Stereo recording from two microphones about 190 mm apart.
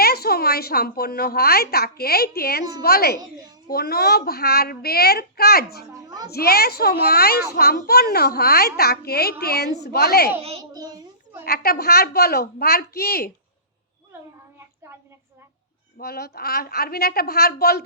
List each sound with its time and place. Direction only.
0.0 s a woman's voice: 55° left (ahead or behind)
5.9 s a child's voice: 20° right (ahead or behind)
6.3 s a woman's voice: 55° left (ahead or behind)
10.6 s a sound: 20° right (ahead or behind)
11.4 s a woman's voice: 55° left (ahead or behind)
16.0 s a woman's voice: 55° left (ahead or behind)